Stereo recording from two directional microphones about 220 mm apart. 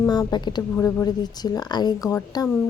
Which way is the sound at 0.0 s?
15° left (ahead or behind).